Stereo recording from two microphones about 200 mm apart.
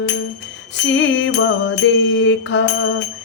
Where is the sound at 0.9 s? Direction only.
70° left (ahead or behind).